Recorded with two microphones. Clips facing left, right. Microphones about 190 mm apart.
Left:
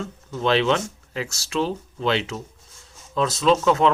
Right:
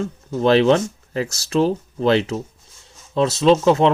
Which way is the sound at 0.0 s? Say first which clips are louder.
Right 6 dB; 40° right (ahead or behind).